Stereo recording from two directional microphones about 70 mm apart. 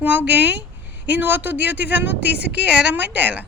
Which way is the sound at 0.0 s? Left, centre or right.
Right.